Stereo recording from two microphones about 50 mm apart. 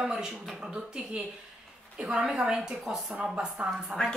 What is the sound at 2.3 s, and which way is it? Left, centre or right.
Speech, centre.